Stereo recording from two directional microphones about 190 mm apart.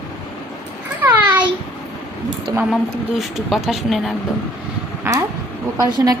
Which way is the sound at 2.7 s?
Centre (ahead or behind).